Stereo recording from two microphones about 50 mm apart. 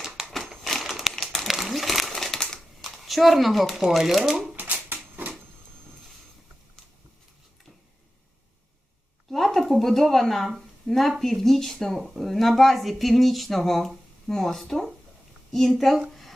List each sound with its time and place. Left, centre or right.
0.3 s crumpling: centre
1.1 s crumpling: centre
1.5 s crumpling: centre
2.2 s crushing: centre
2.8 s speech: centre
4.5 s typewriter: right
9.3 s a sound: centre
10.8 s a woman's voice: centre